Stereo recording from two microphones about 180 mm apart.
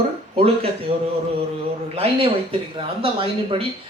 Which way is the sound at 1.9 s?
35° right (ahead or behind).